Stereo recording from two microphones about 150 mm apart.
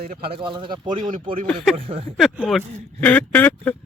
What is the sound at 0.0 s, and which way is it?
Speech, 80° right.